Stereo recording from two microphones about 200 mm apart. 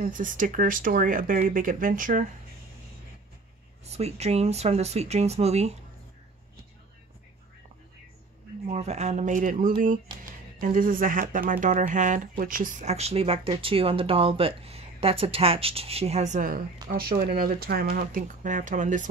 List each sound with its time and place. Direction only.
0.0 s speech: 40° right (ahead or behind)
3.8 s speech: 35° right (ahead or behind)
8.6 s speech: 35° right (ahead or behind)